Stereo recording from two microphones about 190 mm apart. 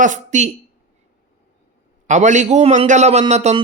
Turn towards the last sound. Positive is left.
turn(degrees=-35)  # may be behind; listen again after turning